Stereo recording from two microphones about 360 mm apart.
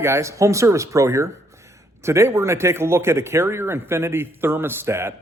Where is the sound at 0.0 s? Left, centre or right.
Centre.